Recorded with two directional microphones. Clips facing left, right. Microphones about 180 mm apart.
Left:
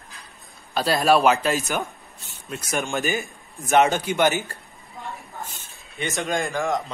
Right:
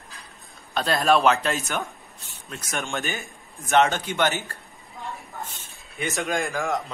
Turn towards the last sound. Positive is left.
turn(degrees=0)  # may be behind; listen again after turning